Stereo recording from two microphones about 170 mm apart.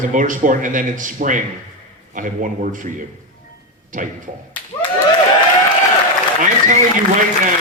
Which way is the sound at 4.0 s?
50° right (ahead or behind).